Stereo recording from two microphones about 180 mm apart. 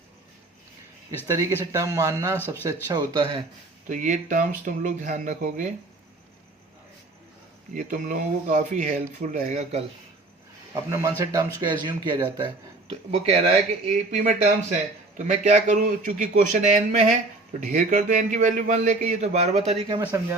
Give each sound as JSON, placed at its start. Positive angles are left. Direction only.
{"t": 1.3, "sound": "speech", "side_deg": -15}
{"t": 3.8, "sound": "speech", "side_deg": -45}
{"t": 7.8, "sound": "speech", "side_deg": -45}
{"t": 10.8, "sound": "a man's voice", "side_deg": -15}